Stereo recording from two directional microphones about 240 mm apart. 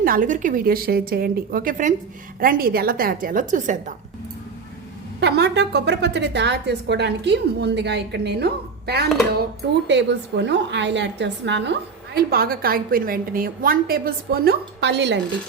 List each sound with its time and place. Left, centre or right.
0.0 s speech: right
5.2 s a woman's voice: right